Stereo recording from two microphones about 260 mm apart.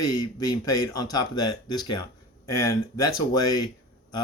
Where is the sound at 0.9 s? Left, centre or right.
Centre.